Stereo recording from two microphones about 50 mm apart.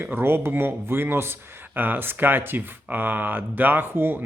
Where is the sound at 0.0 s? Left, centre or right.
Right.